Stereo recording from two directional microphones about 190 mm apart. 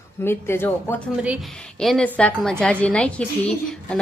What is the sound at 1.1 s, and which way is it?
Speech, 5° right (ahead or behind).